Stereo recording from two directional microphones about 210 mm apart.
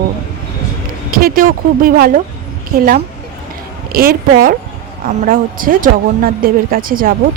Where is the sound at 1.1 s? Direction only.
45° right (ahead or behind).